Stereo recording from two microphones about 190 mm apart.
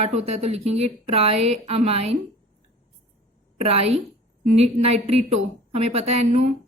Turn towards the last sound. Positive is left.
turn(degrees=-35)  # may be behind; listen again after turning